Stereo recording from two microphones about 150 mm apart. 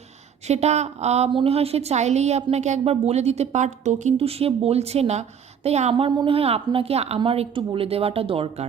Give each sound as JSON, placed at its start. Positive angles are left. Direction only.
{"t": 0.4, "sound": "a woman's voice", "side_deg": -45}